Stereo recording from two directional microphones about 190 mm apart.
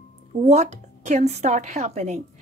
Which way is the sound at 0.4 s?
35° right (ahead or behind).